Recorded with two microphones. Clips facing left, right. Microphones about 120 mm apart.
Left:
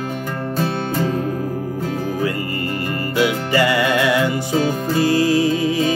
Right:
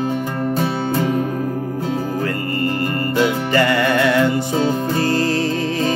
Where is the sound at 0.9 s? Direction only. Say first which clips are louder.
Right 3 dB; 20° right (ahead or behind).